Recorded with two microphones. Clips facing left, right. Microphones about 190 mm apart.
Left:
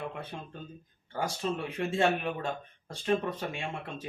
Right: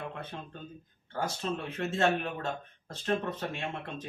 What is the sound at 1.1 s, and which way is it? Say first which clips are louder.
Speech: left 1 dB; 10° left (ahead or behind).